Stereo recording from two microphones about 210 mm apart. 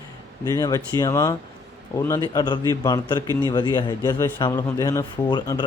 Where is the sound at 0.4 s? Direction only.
15° left (ahead or behind).